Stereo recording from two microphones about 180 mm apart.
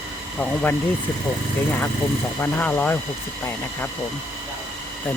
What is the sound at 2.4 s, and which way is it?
Speech, 10° left (ahead or behind).